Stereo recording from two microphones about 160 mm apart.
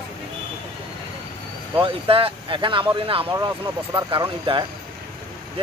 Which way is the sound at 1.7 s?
35° right (ahead or behind).